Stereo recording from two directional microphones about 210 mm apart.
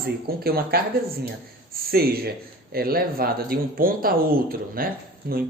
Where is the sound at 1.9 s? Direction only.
45° right (ahead or behind).